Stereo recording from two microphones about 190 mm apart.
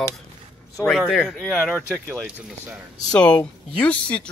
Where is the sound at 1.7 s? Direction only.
10° right (ahead or behind).